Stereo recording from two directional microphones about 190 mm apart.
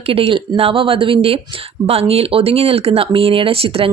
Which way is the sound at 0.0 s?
30° right (ahead or behind).